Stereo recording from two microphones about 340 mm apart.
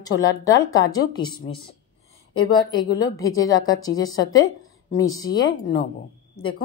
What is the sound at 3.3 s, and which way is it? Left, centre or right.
A woman's voice, left.